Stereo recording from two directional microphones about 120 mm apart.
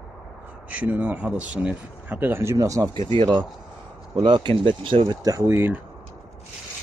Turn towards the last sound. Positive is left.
turn(degrees=-20)  # may be behind; listen again after turning